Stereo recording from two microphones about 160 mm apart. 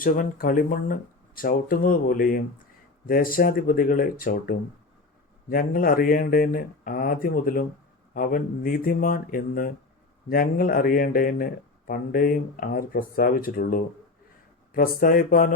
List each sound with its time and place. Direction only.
0.0 s speech: 60° left (ahead or behind)